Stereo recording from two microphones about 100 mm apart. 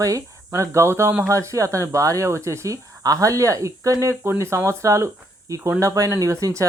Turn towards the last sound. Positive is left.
turn(degrees=-30)  # may be behind; listen again after turning